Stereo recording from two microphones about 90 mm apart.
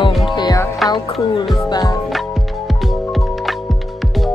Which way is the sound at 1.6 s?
45° left (ahead or behind).